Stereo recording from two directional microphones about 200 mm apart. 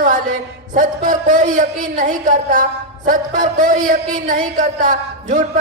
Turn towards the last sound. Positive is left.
turn(degrees=-40)  # may be behind; listen again after turning